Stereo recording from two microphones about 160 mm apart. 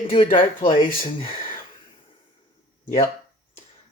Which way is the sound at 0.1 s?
35° left (ahead or behind).